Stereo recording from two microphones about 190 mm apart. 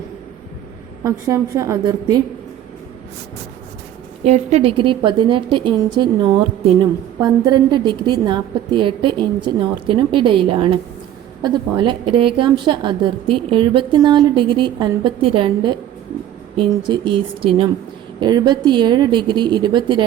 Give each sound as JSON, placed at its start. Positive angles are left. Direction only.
{"t": 1.0, "sound": "a woman's voice", "side_deg": -15}
{"t": 4.2, "sound": "a woman's voice", "side_deg": -35}